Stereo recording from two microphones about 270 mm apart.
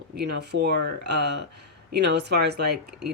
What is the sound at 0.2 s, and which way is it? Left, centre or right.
Speech, right.